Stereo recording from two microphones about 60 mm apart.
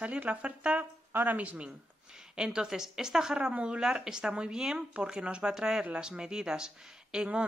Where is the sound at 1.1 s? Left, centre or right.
Right; by 3.3 s centre.